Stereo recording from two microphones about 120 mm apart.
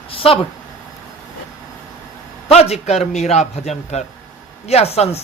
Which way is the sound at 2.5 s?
65° left (ahead or behind).